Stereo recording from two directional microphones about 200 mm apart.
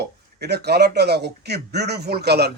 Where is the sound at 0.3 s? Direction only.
55° right (ahead or behind).